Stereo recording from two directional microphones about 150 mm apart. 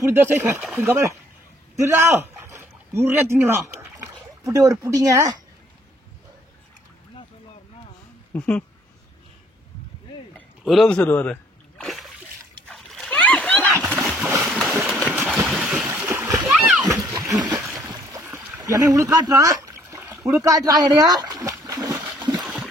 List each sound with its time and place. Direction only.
0.0 s speech: 15° right (ahead or behind)
8.3 s speech: 10° left (ahead or behind)
10.6 s a man's voice: centre (ahead or behind)
11.8 s splash: centre (ahead or behind)
13.9 s splash: 5° right (ahead or behind)
14.4 s a sound: 5° right (ahead or behind)
15.0 s vehicle: centre (ahead or behind)
15.9 s splash: 15° right (ahead or behind)
17.5 s a sound: 5° right (ahead or behind)
18.6 s speech: 25° right (ahead or behind)
20.3 s splash: 25° right (ahead or behind)